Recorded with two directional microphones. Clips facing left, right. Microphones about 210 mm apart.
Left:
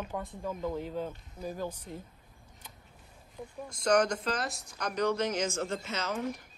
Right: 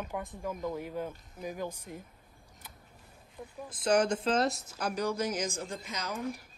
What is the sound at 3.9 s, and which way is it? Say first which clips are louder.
Speech: right 1 dB; 5° right (ahead or behind).